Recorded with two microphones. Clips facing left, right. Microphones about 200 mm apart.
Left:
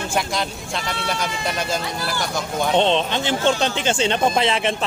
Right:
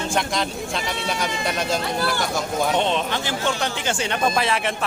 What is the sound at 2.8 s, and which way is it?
Speech, 25° left (ahead or behind).